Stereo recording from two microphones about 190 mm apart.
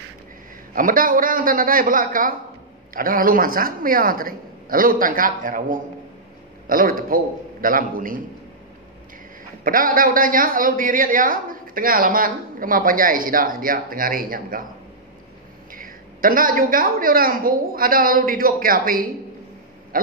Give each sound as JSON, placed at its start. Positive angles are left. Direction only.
{"t": 0.7, "sound": "a woman's voice", "side_deg": -45}
{"t": 9.7, "sound": "a woman's voice", "side_deg": -45}
{"t": 15.7, "sound": "a woman's voice", "side_deg": -45}